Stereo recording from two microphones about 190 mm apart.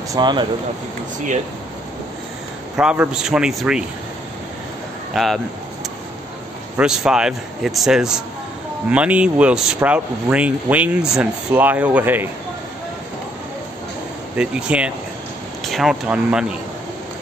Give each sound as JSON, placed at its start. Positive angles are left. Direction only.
{"t": 0.1, "sound": "speech", "side_deg": -25}
{"t": 2.8, "sound": "speech", "side_deg": -5}
{"t": 5.1, "sound": "speech", "side_deg": 0}
{"t": 6.8, "sound": "speech", "side_deg": -5}
{"t": 14.3, "sound": "speech", "side_deg": -5}